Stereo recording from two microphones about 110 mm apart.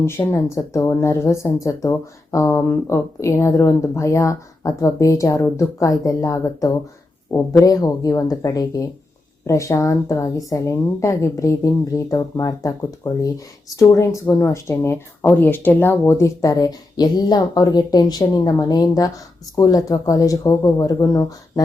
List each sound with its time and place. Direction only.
0.0 s speech: 25° left (ahead or behind)